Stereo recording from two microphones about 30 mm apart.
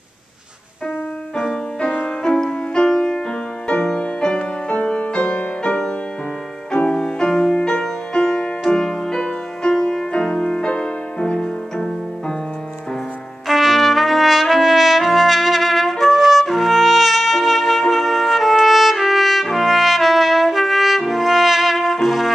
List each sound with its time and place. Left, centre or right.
2.0 s music: left
7.0 s music: left
9.2 s music: left
11.3 s music: left
13.5 s trumpet: centre
22.0 s brass instrument: centre